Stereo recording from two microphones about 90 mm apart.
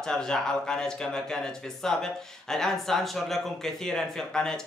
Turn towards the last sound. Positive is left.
turn(degrees=5)  # may be behind; listen again after turning